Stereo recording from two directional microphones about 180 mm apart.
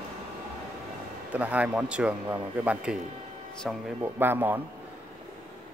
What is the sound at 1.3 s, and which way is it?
Speech, 10° right (ahead or behind).